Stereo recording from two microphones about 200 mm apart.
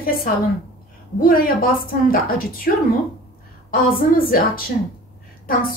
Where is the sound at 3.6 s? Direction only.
45° left (ahead or behind).